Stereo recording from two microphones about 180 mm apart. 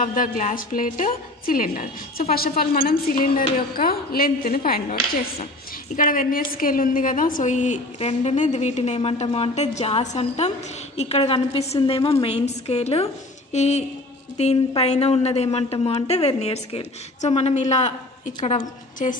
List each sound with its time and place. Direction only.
0.0 s a woman's voice: 50° left (ahead or behind)
5.9 s a woman's voice: 50° left (ahead or behind)